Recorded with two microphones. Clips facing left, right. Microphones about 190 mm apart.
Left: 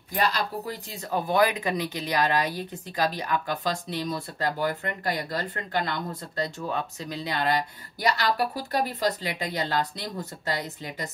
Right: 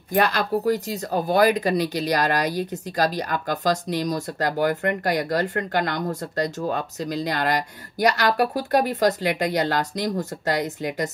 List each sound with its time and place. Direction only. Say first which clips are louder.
0.1 s speech: right 6 dB; 50° right (ahead or behind)
2.2 s speech: right 3 dB; 75° right (ahead or behind)
3.0 s speech: right 3 dB; 40° right (ahead or behind)
4.6 s speech: right 7 dB; 65° right (ahead or behind)
5.9 s speech: right 6 dB; 45° right (ahead or behind)
8.0 s a woman's voice: right 5 dB; 70° right (ahead or behind); by 9.1 s 50° right (ahead or behind)
9.2 s speech: right 8 dB; 75° right (ahead or behind)
10.0 s speech: right 8 dB; 45° right (ahead or behind)
10.5 s a woman's voice: right 7 dB; 75° right (ahead or behind)